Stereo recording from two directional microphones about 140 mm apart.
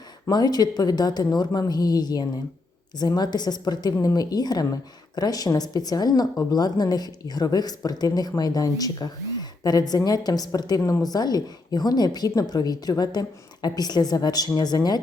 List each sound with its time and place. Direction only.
0.3 s speech: 30° left (ahead or behind)